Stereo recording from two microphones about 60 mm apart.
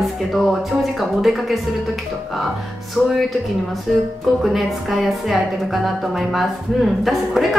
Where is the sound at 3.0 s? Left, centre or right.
Centre.